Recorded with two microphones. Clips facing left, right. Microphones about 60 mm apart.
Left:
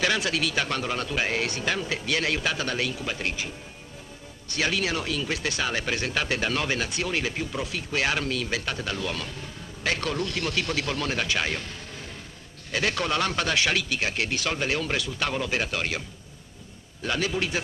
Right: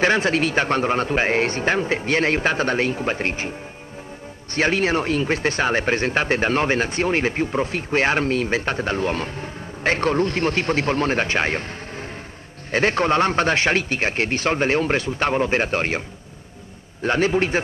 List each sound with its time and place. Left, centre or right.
0.0 s speech: right
4.6 s speech: right
12.7 s speech: right
17.0 s speech: right